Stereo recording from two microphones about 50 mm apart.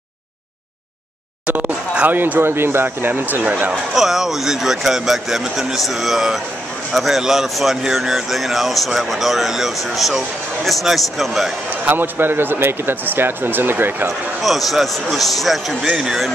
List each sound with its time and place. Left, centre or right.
1.5 s a sound: right
2.0 s speech: right
2.4 s speech: right
3.9 s speech: centre
11.7 s speech: right
14.4 s speech: centre